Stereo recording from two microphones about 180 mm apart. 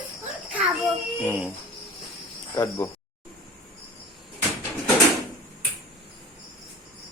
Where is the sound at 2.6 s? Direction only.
15° left (ahead or behind).